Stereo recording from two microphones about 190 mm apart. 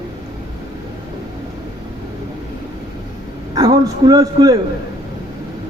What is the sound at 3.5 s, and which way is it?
A man's voice, 20° right (ahead or behind).